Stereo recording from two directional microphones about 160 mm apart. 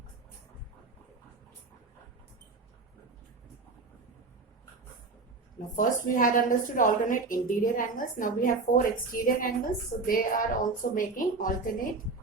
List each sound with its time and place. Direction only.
5.7 s a woman's voice: 55° left (ahead or behind)